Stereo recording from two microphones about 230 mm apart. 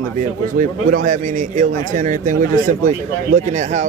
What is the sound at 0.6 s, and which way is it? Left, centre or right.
A man's voice, right.